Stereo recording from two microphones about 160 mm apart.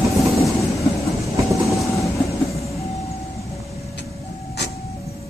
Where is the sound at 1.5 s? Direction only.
Centre (ahead or behind).